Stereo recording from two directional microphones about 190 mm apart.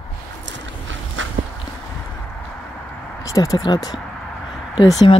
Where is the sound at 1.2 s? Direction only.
90° right.